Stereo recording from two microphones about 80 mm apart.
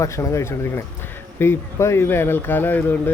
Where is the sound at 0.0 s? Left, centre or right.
Left.